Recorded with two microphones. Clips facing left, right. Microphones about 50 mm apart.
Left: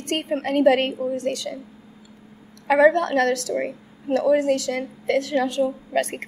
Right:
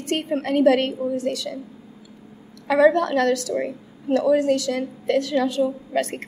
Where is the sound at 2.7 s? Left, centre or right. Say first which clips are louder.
Even; left.